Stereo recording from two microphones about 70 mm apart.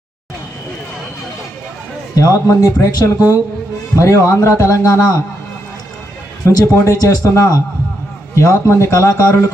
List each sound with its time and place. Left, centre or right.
2.1 s speech: left
6.4 s a man's voice: left
6.8 s speech: left